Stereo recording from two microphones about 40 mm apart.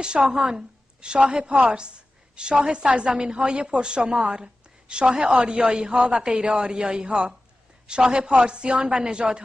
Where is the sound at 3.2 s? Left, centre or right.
Right.